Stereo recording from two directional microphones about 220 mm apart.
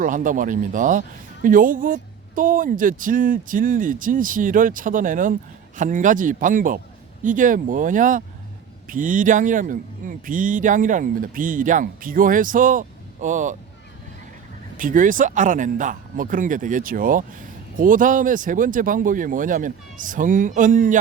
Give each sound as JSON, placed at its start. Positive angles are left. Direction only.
{"t": 0.0, "sound": "speech", "side_deg": -35}
{"t": 14.8, "sound": "speech", "side_deg": -35}